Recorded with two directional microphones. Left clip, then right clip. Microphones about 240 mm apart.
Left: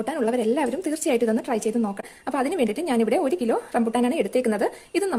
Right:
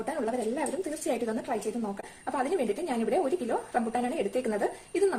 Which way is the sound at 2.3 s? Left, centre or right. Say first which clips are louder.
Left 5 dB; left.